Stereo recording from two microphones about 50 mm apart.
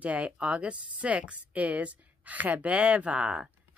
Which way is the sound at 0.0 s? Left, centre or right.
Right.